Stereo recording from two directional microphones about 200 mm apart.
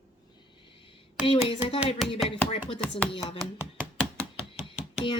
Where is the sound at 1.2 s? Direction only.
25° left (ahead or behind).